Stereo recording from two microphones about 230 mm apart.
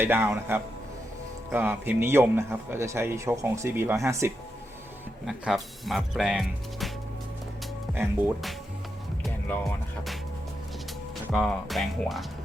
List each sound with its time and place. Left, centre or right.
0.0 s a man's voice: centre
5.2 s speech: centre
7.9 s speech: centre
11.3 s speech: centre